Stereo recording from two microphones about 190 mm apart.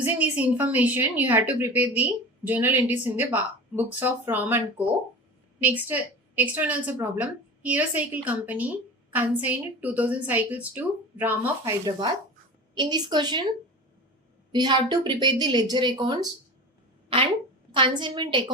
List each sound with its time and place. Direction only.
0.0 s a woman's voice: 10° right (ahead or behind)
14.5 s a woman's voice: 20° right (ahead or behind)
17.7 s a woman's voice: 25° right (ahead or behind)